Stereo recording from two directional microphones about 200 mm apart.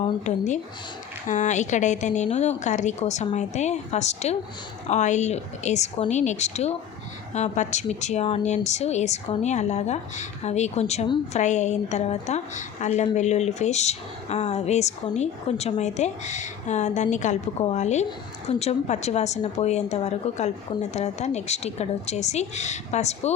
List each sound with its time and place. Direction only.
0.3 s speech: 35° left (ahead or behind)